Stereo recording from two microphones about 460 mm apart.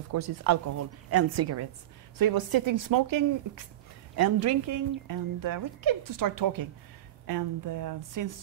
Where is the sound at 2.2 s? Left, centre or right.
Right.